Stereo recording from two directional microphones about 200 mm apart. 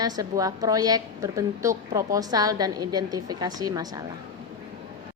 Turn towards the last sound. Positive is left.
turn(degrees=-20)  # may be behind; listen again after turning